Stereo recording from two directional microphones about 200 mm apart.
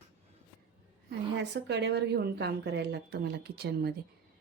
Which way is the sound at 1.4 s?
60° right (ahead or behind).